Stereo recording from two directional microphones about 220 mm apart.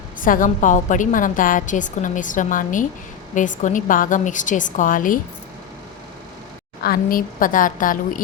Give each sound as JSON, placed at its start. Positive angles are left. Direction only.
{"t": 0.2, "sound": "a woman's voice", "side_deg": 35}
{"t": 6.8, "sound": "a woman's voice", "side_deg": 40}